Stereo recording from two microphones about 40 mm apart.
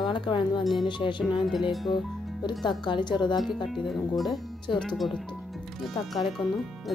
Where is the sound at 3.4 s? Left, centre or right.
Centre.